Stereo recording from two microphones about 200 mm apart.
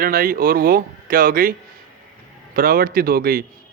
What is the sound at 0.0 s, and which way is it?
A man's voice, 45° right (ahead or behind).